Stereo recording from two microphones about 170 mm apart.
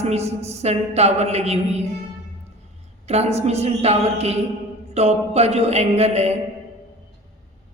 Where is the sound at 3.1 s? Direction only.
40° right (ahead or behind).